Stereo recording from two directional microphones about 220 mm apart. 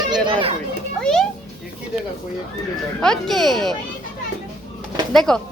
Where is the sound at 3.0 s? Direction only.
Centre (ahead or behind).